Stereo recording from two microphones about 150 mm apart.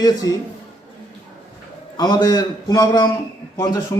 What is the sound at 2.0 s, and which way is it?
A man's voice, 25° left (ahead or behind).